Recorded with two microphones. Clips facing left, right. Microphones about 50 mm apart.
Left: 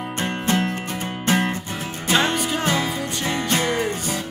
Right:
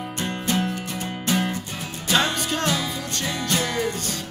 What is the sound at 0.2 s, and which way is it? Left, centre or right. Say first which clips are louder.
Music: left 3 dB; left.